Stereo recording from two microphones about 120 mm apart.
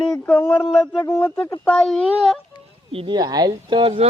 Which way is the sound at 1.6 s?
5° left (ahead or behind).